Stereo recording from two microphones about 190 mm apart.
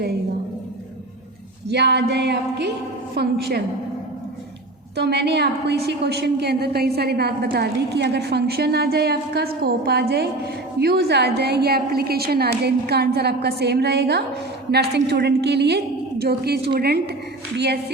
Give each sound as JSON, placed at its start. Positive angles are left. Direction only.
{"t": 1.7, "sound": "a woman's voice", "side_deg": -60}
{"t": 4.9, "sound": "a woman's voice", "side_deg": -60}